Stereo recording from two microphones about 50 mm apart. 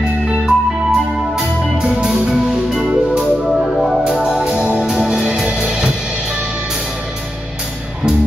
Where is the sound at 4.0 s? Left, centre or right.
Centre.